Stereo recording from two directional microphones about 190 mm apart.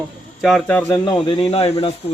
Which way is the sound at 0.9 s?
25° left (ahead or behind).